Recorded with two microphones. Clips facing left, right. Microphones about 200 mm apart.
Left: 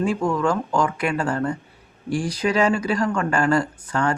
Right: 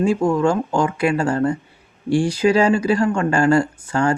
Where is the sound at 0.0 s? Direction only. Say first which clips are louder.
Right 4 dB; 25° right (ahead or behind).